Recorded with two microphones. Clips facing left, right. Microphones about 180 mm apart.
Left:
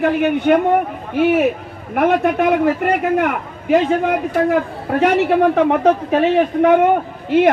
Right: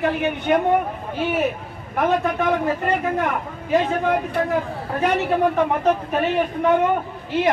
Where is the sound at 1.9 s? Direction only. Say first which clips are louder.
Left 5 dB; 70° left (ahead or behind).